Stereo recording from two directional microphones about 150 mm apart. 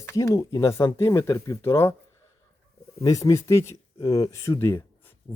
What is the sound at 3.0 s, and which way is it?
Speech, 20° left (ahead or behind).